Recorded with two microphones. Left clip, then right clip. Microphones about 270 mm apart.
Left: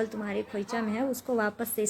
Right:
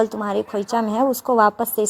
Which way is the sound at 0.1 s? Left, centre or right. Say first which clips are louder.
Right 11 dB; right.